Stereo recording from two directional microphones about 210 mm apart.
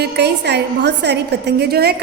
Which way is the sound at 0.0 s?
55° right (ahead or behind).